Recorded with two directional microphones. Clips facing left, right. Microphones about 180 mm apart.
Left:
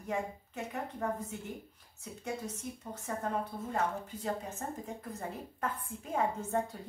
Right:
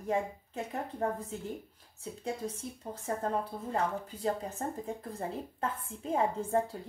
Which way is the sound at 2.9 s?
30° right (ahead or behind).